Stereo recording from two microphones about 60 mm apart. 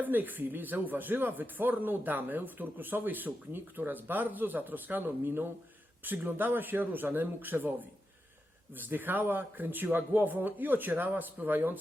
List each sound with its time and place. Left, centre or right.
0.0 s speech: right
8.8 s speech: right